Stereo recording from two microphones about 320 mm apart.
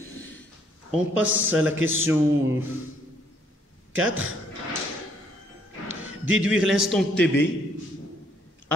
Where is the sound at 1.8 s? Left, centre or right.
Right.